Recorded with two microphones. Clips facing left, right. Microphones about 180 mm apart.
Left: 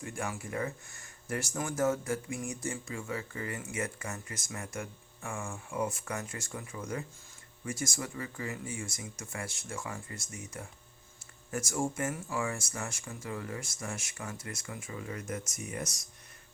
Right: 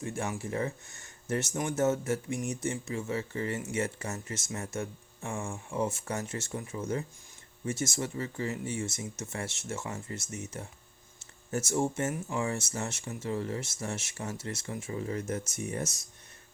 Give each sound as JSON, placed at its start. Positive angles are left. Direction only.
{"t": 0.0, "sound": "speech", "side_deg": -25}